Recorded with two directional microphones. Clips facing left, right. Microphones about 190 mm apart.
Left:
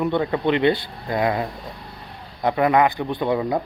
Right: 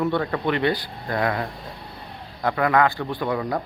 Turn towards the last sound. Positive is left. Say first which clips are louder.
# left 3 dB
turn(degrees=20)  # may be behind; listen again after turning